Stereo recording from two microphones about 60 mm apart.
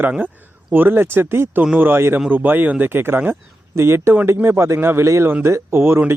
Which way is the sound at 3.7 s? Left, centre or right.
Right.